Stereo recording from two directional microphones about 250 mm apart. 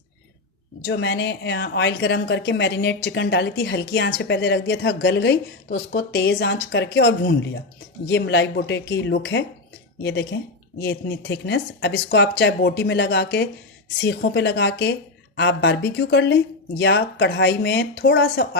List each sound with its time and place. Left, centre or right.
0.9 s a woman's voice: left